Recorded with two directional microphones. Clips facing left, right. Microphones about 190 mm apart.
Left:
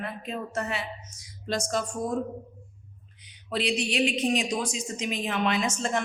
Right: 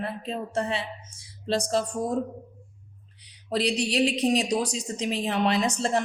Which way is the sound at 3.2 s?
35° right (ahead or behind).